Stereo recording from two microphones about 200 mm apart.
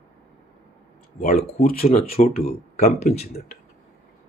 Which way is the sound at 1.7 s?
45° left (ahead or behind).